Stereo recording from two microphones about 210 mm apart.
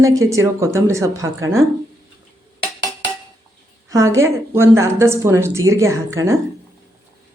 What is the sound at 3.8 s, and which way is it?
Speech, 15° right (ahead or behind).